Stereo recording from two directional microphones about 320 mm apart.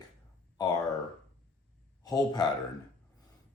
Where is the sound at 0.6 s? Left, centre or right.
Centre.